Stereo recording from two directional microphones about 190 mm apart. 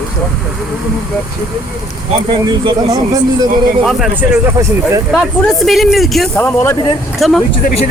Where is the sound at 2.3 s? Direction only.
25° right (ahead or behind).